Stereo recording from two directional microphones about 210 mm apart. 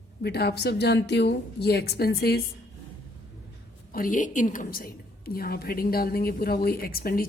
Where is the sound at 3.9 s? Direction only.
40° left (ahead or behind).